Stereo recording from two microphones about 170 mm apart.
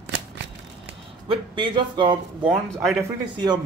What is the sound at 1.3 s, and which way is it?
Speech, 30° right (ahead or behind).